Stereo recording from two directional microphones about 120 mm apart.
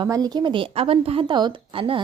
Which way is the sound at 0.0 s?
30° right (ahead or behind).